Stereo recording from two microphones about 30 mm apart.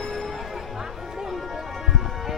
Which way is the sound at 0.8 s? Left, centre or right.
Centre.